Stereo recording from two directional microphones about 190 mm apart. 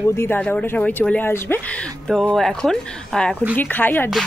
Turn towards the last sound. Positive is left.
turn(degrees=10)  # may be behind; listen again after turning